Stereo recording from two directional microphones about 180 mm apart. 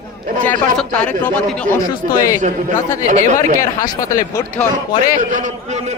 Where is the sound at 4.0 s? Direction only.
20° left (ahead or behind).